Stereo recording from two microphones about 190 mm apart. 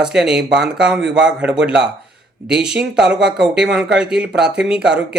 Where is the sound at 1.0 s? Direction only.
70° right (ahead or behind).